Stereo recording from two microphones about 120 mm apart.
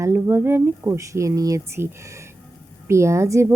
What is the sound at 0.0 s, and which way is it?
Speech, 20° right (ahead or behind).